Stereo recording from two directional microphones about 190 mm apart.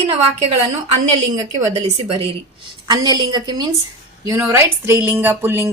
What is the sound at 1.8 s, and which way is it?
Speech, 30° right (ahead or behind).